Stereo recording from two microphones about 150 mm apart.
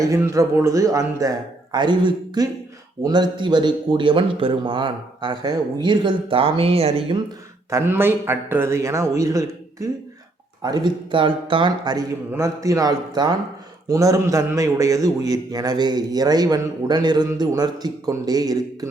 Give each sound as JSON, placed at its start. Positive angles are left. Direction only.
{"t": 0.0, "sound": "a man's voice", "side_deg": -20}
{"t": 7.7, "sound": "a man's voice", "side_deg": -15}